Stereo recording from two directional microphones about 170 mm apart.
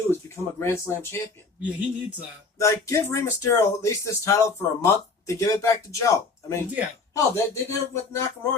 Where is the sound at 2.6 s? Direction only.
20° left (ahead or behind).